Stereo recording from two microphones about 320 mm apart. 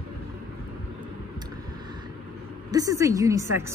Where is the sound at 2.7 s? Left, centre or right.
Centre.